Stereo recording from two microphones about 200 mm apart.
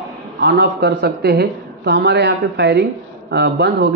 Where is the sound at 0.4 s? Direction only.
55° right (ahead or behind).